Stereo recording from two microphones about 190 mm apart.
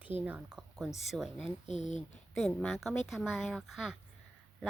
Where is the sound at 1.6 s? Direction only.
40° left (ahead or behind).